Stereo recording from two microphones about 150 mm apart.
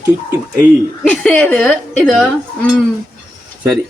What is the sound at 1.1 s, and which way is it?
Speech, 10° left (ahead or behind).